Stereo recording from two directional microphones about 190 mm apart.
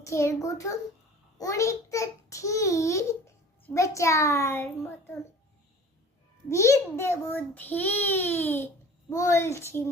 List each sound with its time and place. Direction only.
0.0 s a child's voice: 15° left (ahead or behind)
6.5 s a child's voice: 15° left (ahead or behind)